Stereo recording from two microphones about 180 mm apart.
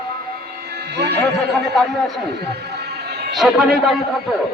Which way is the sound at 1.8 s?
Centre (ahead or behind).